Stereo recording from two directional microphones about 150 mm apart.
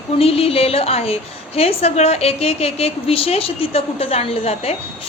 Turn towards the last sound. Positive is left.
turn(degrees=40)  # may be behind; listen again after turning